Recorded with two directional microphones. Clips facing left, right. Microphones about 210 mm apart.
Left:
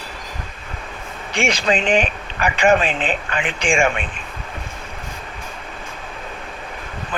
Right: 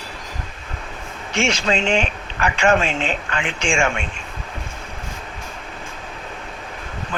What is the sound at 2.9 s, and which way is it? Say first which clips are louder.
Speech: left 1 dB; 55° left (ahead or behind).